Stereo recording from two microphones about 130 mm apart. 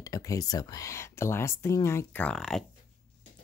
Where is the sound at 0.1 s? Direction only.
30° left (ahead or behind).